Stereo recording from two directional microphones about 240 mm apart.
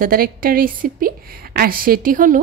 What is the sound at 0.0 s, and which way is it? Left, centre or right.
A woman's voice, right.